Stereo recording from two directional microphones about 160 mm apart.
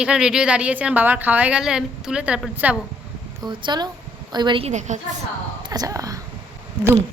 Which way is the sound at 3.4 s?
25° right (ahead or behind).